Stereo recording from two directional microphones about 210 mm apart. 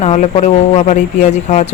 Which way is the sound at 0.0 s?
30° left (ahead or behind).